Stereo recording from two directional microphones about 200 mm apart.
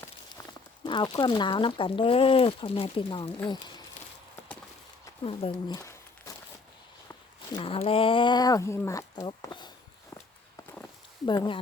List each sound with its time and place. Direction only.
0.9 s speech: 25° left (ahead or behind)
5.2 s a sound: 25° left (ahead or behind)
7.5 s speech: 25° left (ahead or behind)
11.3 s speech: 25° left (ahead or behind)